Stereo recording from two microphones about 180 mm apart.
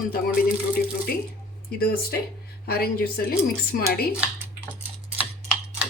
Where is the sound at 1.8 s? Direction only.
55° left (ahead or behind).